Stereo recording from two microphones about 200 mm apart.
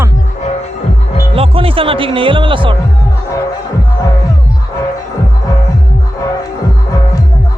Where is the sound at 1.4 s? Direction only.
25° right (ahead or behind).